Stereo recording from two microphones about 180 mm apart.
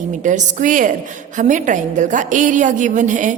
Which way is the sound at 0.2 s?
45° right (ahead or behind).